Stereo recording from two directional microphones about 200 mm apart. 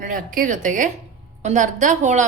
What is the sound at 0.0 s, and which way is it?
A woman's voice, 40° right (ahead or behind).